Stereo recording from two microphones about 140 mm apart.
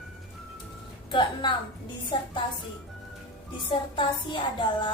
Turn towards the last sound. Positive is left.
turn(degrees=35)  # may be behind; listen again after turning